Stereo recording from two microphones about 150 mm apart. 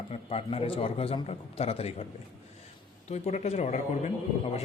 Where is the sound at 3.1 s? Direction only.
45° left (ahead or behind).